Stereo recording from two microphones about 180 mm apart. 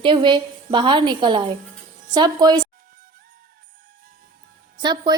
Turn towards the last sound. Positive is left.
turn(degrees=-25)  # may be behind; listen again after turning